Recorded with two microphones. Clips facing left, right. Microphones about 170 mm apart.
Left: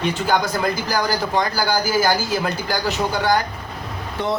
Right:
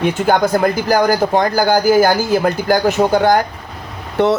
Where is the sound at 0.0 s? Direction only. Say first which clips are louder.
Right 6 dB; 55° right (ahead or behind).